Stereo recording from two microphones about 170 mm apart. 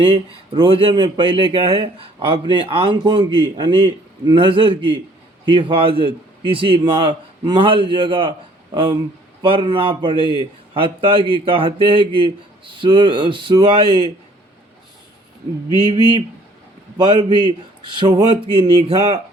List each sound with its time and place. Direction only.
0.0 s speech: 30° right (ahead or behind)
15.8 s speech: 25° right (ahead or behind)